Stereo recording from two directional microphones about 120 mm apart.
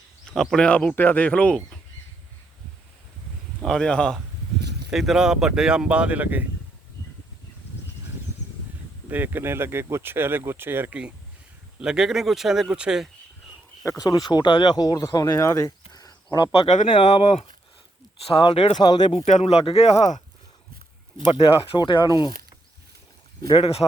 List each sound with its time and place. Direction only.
0.3 s speech: 5° left (ahead or behind)
3.6 s speech: 5° left (ahead or behind); by 6.4 s 15° right (ahead or behind)
9.0 s speech: 15° right (ahead or behind)
13.8 s speech: 30° left (ahead or behind)
16.6 s speech: 85° left
16.9 s speech: 40° left (ahead or behind)
18.3 s speech: 45° left (ahead or behind)
18.8 s speech: 35° left (ahead or behind)
19.1 s speech: 75° left (ahead or behind)
21.3 s speech: 50° left (ahead or behind)
23.6 s speech: 55° left (ahead or behind)